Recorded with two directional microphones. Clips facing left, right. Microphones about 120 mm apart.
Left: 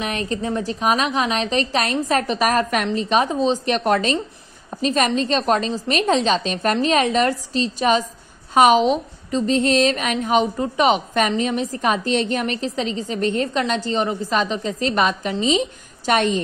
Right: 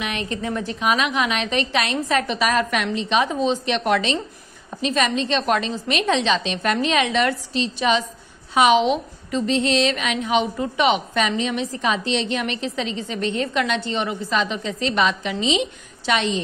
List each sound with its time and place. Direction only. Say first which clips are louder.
0.0 s a woman's voice: left 2 dB; 35° left (ahead or behind)